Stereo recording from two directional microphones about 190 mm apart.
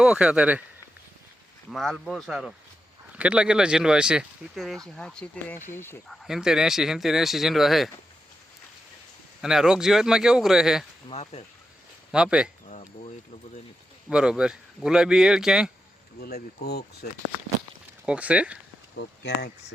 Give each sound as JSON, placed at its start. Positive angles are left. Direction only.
{"t": 0.0, "sound": "speech", "side_deg": -5}
{"t": 1.7, "sound": "speech", "side_deg": 0}
{"t": 6.2, "sound": "speech", "side_deg": 0}
{"t": 9.4, "sound": "speech", "side_deg": -5}
{"t": 11.1, "sound": "speech", "side_deg": 35}
{"t": 12.1, "sound": "speech", "side_deg": -5}
{"t": 12.6, "sound": "a sound", "side_deg": 35}
{"t": 14.1, "sound": "speech", "side_deg": -5}
{"t": 16.2, "sound": "speech", "side_deg": 55}
{"t": 18.0, "sound": "speech", "side_deg": -5}
{"t": 18.9, "sound": "speech", "side_deg": 65}